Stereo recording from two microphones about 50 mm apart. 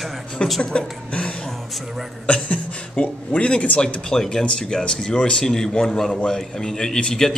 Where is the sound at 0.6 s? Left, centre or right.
Centre.